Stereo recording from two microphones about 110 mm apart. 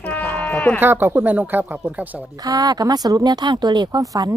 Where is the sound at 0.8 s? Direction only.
20° right (ahead or behind).